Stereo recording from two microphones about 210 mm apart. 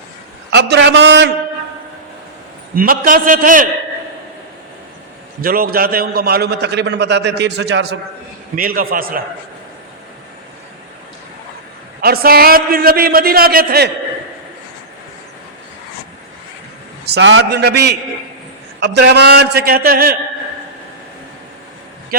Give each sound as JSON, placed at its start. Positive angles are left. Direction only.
{"t": 0.5, "sound": "a man's voice", "side_deg": -55}
{"t": 2.7, "sound": "a man's voice", "side_deg": -40}
{"t": 5.4, "sound": "a man's voice", "side_deg": -45}
{"t": 12.0, "sound": "a man's voice", "side_deg": -45}
{"t": 17.1, "sound": "a man's voice", "side_deg": -60}